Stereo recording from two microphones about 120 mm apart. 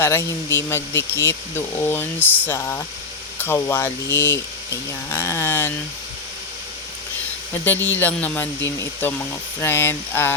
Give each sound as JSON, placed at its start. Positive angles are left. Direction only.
{"t": 0.0, "sound": "speech", "side_deg": 20}
{"t": 7.6, "sound": "speech", "side_deg": 15}